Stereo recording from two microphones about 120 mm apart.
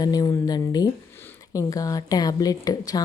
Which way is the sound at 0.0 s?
30° left (ahead or behind).